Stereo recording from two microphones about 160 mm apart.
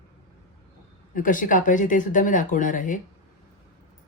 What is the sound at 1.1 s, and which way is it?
Speech, 55° left (ahead or behind).